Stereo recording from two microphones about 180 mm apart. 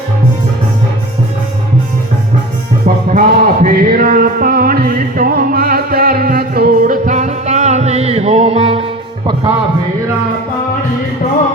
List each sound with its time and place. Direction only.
2.8 s music: 45° right (ahead or behind); by 9.5 s 30° right (ahead or behind)